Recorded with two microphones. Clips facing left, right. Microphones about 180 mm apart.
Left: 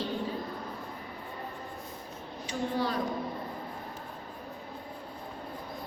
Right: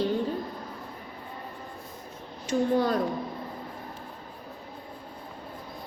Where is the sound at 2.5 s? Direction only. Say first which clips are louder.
Right 7 dB; 45° right (ahead or behind).